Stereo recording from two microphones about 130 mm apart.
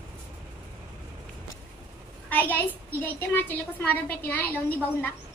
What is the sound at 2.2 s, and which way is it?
A woman's voice, 15° left (ahead or behind).